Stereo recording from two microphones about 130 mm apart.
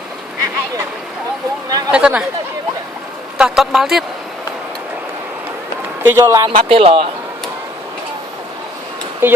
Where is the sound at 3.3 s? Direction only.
5° right (ahead or behind).